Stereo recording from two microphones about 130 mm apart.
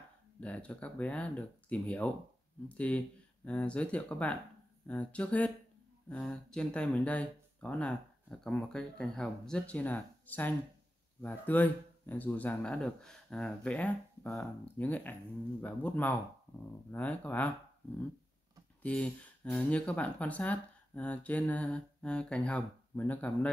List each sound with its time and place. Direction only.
0.4 s speech: 10° left (ahead or behind)
18.8 s speech: 10° left (ahead or behind)